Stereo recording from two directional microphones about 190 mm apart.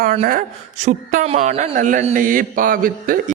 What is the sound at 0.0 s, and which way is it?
A woman's voice, 40° right (ahead or behind).